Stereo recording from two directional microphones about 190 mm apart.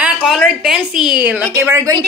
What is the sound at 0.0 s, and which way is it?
A woman's voice, 5° right (ahead or behind).